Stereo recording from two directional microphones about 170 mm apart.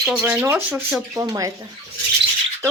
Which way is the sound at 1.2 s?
20° right (ahead or behind).